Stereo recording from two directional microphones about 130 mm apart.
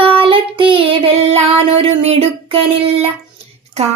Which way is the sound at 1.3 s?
55° right (ahead or behind).